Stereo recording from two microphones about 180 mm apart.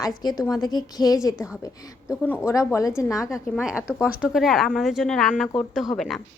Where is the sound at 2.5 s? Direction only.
15° left (ahead or behind).